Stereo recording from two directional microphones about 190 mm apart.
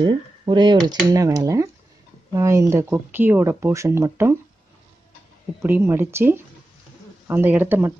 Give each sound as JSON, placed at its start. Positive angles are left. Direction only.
{"t": 0.0, "sound": "speech", "side_deg": -25}
{"t": 5.6, "sound": "speech", "side_deg": -10}